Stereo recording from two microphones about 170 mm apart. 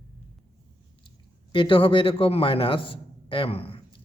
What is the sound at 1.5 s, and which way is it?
A man's voice, 30° left (ahead or behind).